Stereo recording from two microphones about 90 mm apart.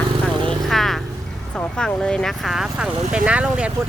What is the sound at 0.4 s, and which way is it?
Vehicle, centre (ahead or behind).